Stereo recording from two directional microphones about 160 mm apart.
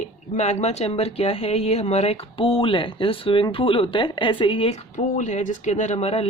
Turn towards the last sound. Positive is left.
turn(degrees=40)  # may be behind; listen again after turning